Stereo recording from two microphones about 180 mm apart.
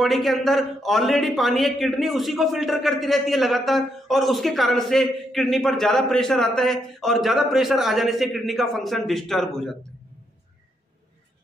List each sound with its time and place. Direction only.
0.0 s a man's voice: centre (ahead or behind)